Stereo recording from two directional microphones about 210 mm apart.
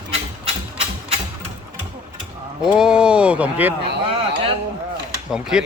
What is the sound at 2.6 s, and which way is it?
Speech, 5° right (ahead or behind).